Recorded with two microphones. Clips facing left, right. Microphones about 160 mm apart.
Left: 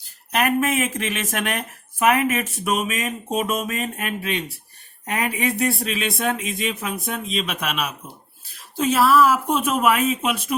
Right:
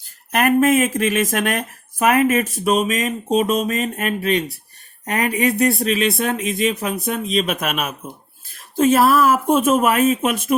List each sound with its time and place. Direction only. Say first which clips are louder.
0.3 s speech: right 5 dB; 45° right (ahead or behind)